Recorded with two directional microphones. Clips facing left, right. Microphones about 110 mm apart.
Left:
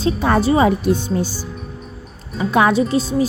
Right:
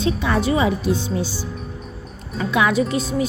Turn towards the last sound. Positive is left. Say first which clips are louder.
# left 3 dB
turn(degrees=30)  # may be behind; listen again after turning